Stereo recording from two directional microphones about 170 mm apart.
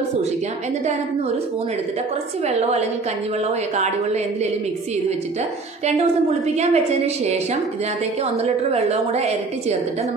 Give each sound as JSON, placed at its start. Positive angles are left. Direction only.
{"t": 2.4, "sound": "a woman's voice", "side_deg": -40}
{"t": 5.9, "sound": "a woman's voice", "side_deg": -40}
{"t": 8.5, "sound": "a woman's voice", "side_deg": -40}